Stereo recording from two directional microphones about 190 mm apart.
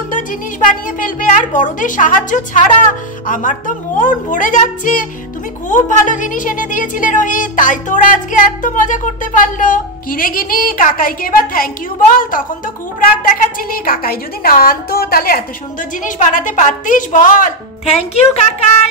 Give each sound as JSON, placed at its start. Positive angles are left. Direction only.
{"t": 0.1, "sound": "a woman's voice", "side_deg": 45}
{"t": 17.9, "sound": "a woman's voice", "side_deg": 35}